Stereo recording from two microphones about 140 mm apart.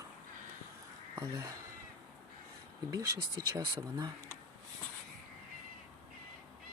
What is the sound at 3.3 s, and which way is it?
Speech, 25° right (ahead or behind).